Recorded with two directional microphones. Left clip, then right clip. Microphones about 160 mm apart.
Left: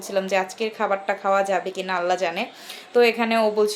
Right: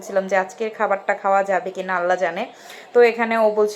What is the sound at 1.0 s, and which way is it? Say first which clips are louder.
Speech: right 2 dB; 10° right (ahead or behind).